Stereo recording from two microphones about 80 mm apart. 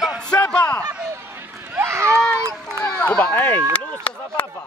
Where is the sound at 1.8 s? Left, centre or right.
Right.